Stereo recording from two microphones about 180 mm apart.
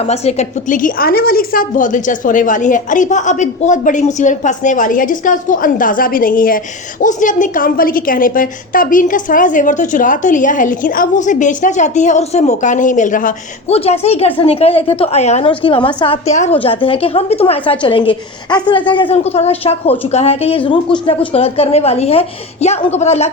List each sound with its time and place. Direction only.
0.0 s a woman's voice: 35° left (ahead or behind)
13.7 s a woman's voice: 35° left (ahead or behind)